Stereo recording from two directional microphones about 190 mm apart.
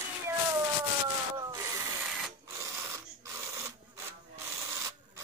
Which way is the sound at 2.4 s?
15° right (ahead or behind).